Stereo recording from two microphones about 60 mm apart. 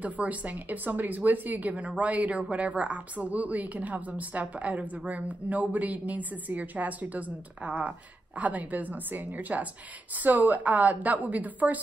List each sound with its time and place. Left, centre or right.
0.0 s a woman's voice: right